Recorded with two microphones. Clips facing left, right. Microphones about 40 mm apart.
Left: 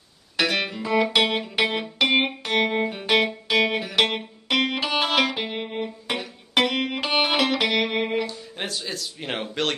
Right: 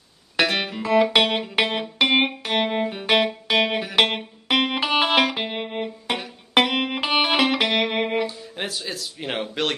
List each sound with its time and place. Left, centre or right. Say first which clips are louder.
0.4 s music: right 2 dB; centre